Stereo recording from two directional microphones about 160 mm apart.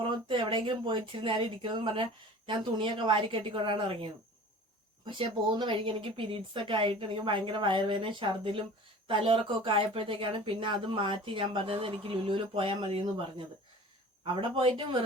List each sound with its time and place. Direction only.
0.1 s speech: 30° right (ahead or behind)